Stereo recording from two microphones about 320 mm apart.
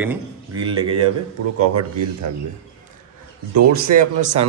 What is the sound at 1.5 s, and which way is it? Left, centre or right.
Speech, right.